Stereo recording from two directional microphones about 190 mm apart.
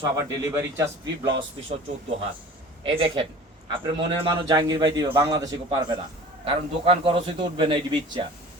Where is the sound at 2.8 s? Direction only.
30° right (ahead or behind).